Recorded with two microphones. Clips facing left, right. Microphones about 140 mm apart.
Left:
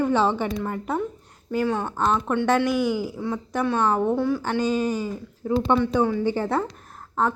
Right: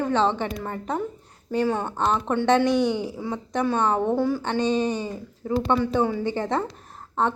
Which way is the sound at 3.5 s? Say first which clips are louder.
Even; 5° left (ahead or behind).